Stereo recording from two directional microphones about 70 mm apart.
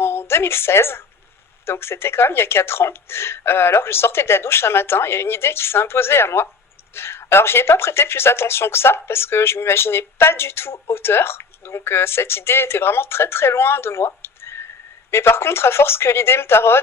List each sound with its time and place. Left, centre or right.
0.0 s a woman's voice: left